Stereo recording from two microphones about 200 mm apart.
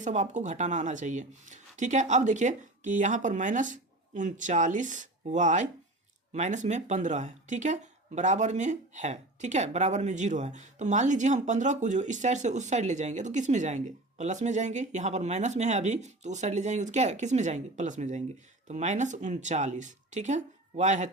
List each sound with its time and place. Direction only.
0.0 s speech: 35° right (ahead or behind)